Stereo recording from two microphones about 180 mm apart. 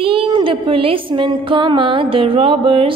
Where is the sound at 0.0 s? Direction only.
30° right (ahead or behind).